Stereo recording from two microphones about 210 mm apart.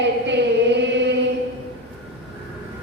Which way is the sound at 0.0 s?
55° right (ahead or behind).